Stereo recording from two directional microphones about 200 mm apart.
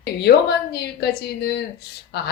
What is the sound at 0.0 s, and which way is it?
A woman's voice, 55° left (ahead or behind).